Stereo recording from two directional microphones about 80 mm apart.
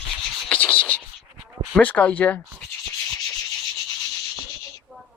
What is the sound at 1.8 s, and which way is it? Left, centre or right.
Speech, centre.